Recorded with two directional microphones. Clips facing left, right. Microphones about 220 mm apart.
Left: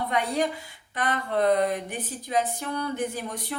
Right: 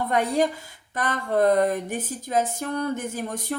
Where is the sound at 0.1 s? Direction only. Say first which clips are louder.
Right 5 dB; 45° right (ahead or behind).